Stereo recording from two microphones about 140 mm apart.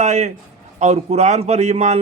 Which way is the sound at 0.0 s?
55° right (ahead or behind).